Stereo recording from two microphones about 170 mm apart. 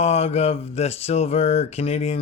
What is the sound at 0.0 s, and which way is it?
Speech, 40° left (ahead or behind).